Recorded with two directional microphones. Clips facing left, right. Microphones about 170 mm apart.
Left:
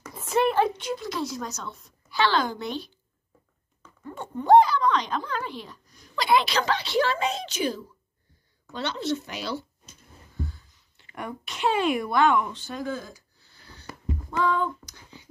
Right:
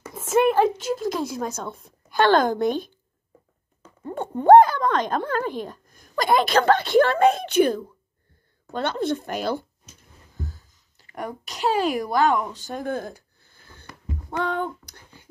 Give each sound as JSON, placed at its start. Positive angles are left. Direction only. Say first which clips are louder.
{"t": 0.1, "sound": "speech", "louder": "right 4 dB", "side_deg": -50}
{"t": 4.1, "sound": "speech", "louder": "right 5 dB", "side_deg": -55}
{"t": 14.3, "sound": "a sound", "louder": "left 1 dB", "side_deg": -60}